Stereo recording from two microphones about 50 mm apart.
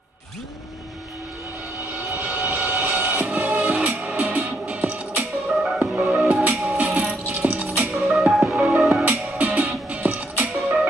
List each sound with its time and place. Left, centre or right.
2.0 s vehicle: right
4.4 s music: right
5.5 s music: centre; by 7.9 s right
8.0 s music: centre
8.5 s music: centre
9.4 s music: right